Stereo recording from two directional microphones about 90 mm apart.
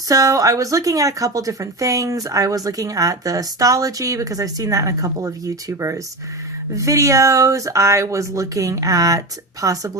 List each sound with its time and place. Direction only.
0.1 s a woman's voice: 40° right (ahead or behind)